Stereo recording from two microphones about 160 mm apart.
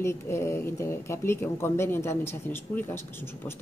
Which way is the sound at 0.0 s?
15° left (ahead or behind).